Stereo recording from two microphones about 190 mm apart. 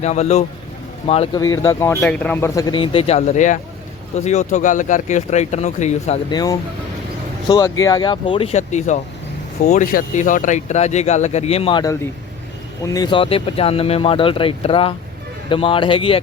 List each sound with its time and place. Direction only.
0.0 s speech: 35° left (ahead or behind)
1.4 s speech: 20° left (ahead or behind); by 6.1 s 35° left (ahead or behind)
6.3 s speech: 20° left (ahead or behind)